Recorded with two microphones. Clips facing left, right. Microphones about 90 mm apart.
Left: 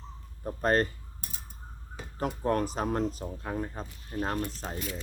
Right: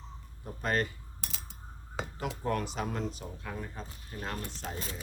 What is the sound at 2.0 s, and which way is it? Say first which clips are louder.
Dishes: right 8 dB; 90° right.